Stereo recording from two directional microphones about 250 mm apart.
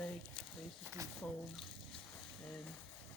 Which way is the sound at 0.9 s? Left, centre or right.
Centre.